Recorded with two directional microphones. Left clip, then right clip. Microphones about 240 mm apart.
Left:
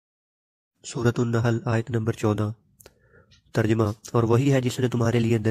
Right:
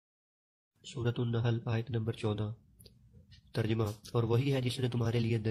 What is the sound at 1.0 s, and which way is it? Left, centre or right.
Speech, left.